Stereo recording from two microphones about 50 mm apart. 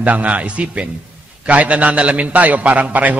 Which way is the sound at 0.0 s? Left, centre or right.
Right.